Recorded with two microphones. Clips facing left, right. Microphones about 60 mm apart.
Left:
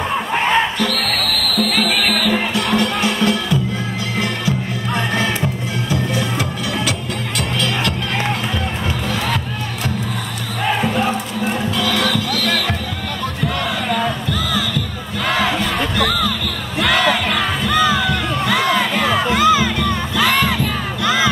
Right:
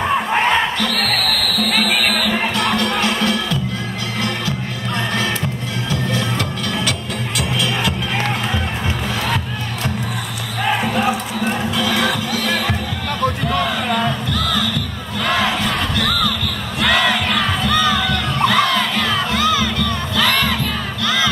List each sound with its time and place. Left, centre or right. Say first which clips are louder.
0.5 s music: left 1 dB; centre
4.2 s music: left 2 dB; centre
7.3 s music: even; centre
10.6 s music: even; centre
13.5 s basketball bounce: right 2 dB; centre
15.2 s crowd: even; centre
16.0 s music: left 2 dB; centre
16.8 s crowd: even; centre; by 20.2 s left
20.2 s crowd: left 2 dB; centre
21.0 s battle cry: left 2 dB; centre